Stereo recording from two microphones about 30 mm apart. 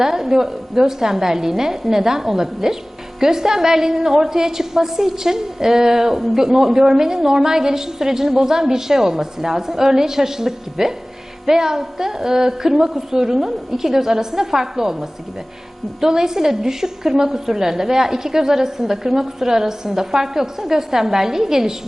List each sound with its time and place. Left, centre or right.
0.0 s a woman's voice: centre
16.0 s a woman's voice: centre